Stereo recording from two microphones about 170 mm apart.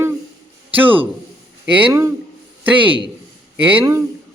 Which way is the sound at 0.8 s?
10° right (ahead or behind).